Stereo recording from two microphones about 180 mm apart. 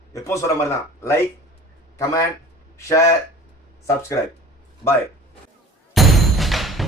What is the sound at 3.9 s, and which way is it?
Speech, 15° left (ahead or behind).